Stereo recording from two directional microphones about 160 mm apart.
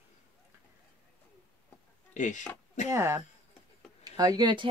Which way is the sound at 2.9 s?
15° right (ahead or behind).